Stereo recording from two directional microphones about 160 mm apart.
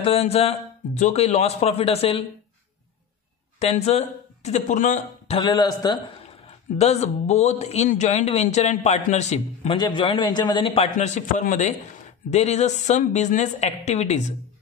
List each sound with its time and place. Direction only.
0.0 s a man's voice: 40° left (ahead or behind)
3.5 s speech: 40° left (ahead or behind)
5.4 s a man's voice: 25° left (ahead or behind)
6.8 s a man's voice: 45° left (ahead or behind)
9.8 s a man's voice: 30° left (ahead or behind)
11.0 s a man's voice: 50° left (ahead or behind)